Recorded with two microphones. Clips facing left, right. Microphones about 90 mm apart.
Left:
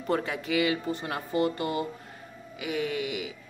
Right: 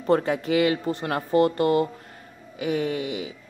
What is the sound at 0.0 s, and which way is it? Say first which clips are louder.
Speech: right 7 dB; 40° right (ahead or behind).